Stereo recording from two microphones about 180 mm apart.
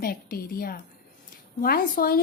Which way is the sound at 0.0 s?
55° left (ahead or behind).